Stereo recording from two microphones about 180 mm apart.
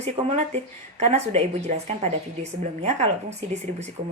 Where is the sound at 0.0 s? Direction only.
40° right (ahead or behind).